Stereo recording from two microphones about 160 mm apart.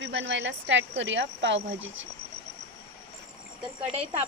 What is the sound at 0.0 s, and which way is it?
A woman's voice, 90° right.